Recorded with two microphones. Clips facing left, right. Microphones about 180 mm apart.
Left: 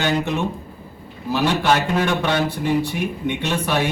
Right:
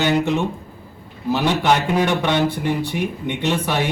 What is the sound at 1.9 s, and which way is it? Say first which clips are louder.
A man's voice: right 1 dB; 15° right (ahead or behind).